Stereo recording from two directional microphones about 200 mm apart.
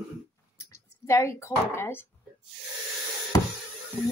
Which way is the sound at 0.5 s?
15° left (ahead or behind).